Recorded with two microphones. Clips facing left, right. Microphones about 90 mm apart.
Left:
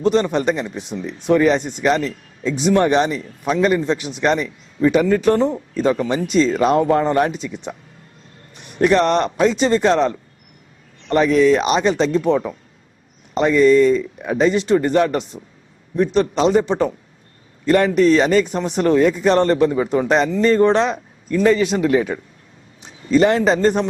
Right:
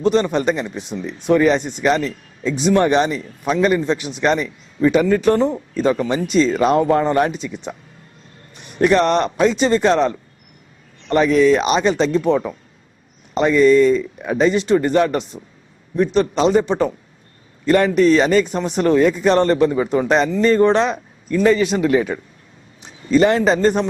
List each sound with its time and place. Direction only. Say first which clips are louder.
0.0 s speech: even; 20° right (ahead or behind)
8.8 s a man's voice: even; 15° right (ahead or behind)